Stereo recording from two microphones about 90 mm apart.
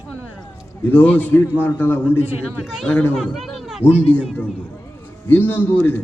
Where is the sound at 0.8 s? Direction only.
20° left (ahead or behind).